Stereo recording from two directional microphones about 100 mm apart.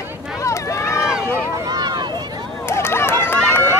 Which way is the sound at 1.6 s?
45° right (ahead or behind).